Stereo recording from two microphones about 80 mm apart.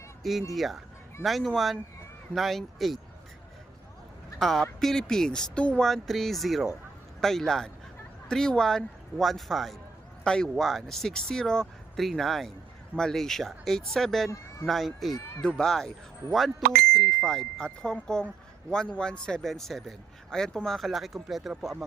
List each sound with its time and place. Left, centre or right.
0.2 s speech: centre
4.4 s speech: centre
5.9 s speech: centre
10.5 s speech: centre